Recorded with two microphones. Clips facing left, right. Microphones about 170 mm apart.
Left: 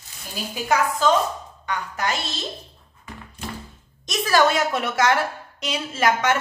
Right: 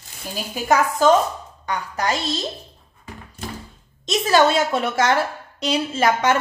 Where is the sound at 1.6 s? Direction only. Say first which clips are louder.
Right 3 dB; 35° right (ahead or behind).